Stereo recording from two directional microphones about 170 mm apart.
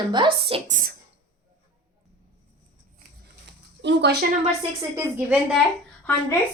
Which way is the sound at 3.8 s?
85° right.